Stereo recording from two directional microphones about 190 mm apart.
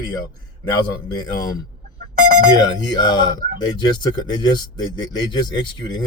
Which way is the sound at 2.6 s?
20° left (ahead or behind).